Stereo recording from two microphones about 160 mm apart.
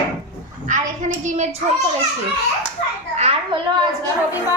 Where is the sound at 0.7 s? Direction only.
50° right (ahead or behind).